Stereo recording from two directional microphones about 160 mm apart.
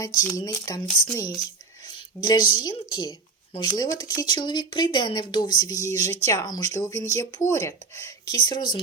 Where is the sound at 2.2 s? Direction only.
30° left (ahead or behind).